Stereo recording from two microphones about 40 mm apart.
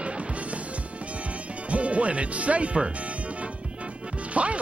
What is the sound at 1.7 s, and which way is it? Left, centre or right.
Speech, right.